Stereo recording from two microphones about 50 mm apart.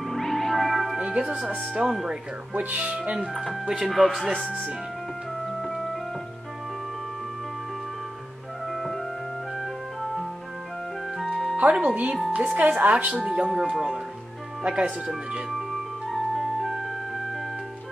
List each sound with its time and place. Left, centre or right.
0.1 s music: centre
0.9 s speech: centre
2.5 s speech: right; by 3.9 s centre
3.9 s speech: centre
5.6 s music: centre
8.7 s music: centre
11.1 s music: centre
11.7 s speech: right
14.6 s speech: right
16.1 s music: centre